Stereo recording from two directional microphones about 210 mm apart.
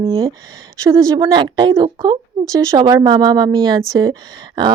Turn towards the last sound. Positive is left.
turn(degrees=-20)  # may be behind; listen again after turning